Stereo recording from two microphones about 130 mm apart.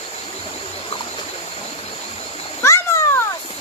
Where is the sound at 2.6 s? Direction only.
20° left (ahead or behind).